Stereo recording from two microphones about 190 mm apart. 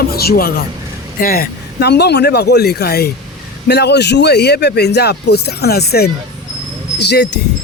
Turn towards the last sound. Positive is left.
turn(degrees=60)  # may be behind; listen again after turning